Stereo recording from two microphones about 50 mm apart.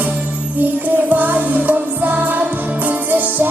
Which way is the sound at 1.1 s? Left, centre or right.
Right.